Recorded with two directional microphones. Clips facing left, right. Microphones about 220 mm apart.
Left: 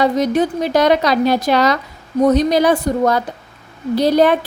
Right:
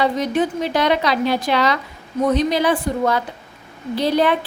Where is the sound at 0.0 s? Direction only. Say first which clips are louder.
Left 4 dB; 40° left (ahead or behind).